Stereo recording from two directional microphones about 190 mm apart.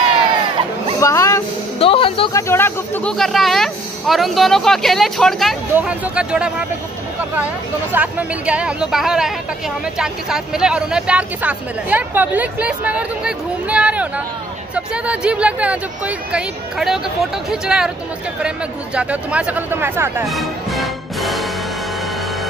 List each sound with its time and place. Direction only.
1.0 s speech: 15° left (ahead or behind)
1.8 s music: 30° left (ahead or behind)
2.3 s speech: 15° left (ahead or behind); by 6.5 s 5° right (ahead or behind)
7.9 s speech: 5° right (ahead or behind)
18.9 s speech: 5° right (ahead or behind)
20.2 s music: centre (ahead or behind)